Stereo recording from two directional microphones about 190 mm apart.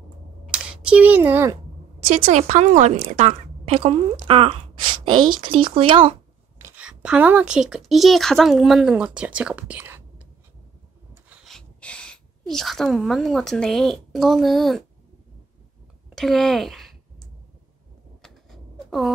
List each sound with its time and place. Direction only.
0.7 s speech: 5° right (ahead or behind)
2.0 s a woman's voice: 40° right (ahead or behind)
6.6 s a woman's voice: 5° right (ahead or behind)
11.2 s speech: centre (ahead or behind)
16.2 s speech: centre (ahead or behind)
18.2 s a sound: centre (ahead or behind)